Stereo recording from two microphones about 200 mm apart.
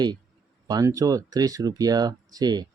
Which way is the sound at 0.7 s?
15° right (ahead or behind).